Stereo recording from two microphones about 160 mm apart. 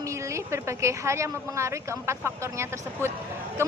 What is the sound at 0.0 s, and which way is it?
Speech, 20° right (ahead or behind).